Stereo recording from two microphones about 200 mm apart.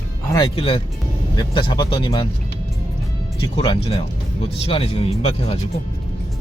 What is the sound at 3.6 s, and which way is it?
Speech, 25° left (ahead or behind).